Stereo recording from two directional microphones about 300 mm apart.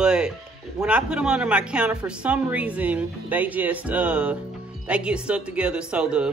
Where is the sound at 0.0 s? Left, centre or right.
Centre.